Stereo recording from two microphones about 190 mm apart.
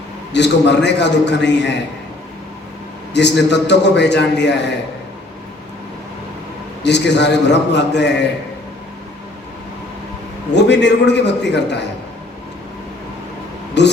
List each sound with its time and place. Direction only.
0.3 s a man's voice: 65° left (ahead or behind)
3.1 s a man's voice: 65° left (ahead or behind)
6.8 s a man's voice: 65° left (ahead or behind)
10.5 s a man's voice: 65° left (ahead or behind)
13.8 s speech: 65° left (ahead or behind)